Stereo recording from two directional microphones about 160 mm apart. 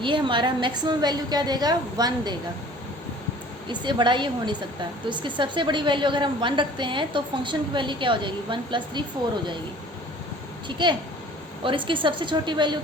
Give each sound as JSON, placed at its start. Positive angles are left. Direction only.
{"t": 0.0, "sound": "a woman's voice", "side_deg": -30}
{"t": 3.7, "sound": "a woman's voice", "side_deg": -30}
{"t": 10.7, "sound": "a woman's voice", "side_deg": -30}